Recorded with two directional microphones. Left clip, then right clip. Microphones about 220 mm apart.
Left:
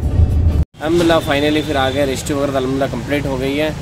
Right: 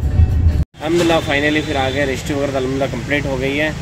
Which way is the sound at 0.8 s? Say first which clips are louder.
Left 1 dB; 15° left (ahead or behind).